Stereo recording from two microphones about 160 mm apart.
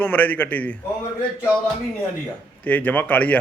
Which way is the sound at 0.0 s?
10° left (ahead or behind).